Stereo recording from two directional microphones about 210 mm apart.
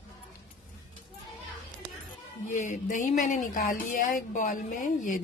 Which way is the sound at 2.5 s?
35° left (ahead or behind).